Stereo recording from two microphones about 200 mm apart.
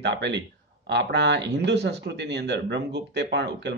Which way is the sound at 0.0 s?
60° right (ahead or behind).